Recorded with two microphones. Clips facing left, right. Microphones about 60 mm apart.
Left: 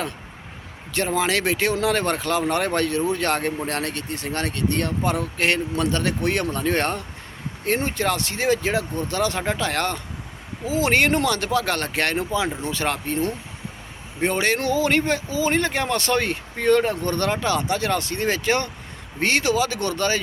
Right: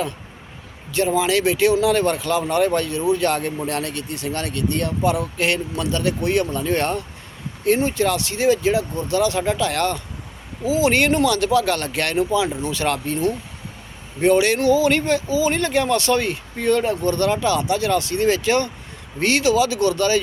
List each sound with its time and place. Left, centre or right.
0.9 s speech: left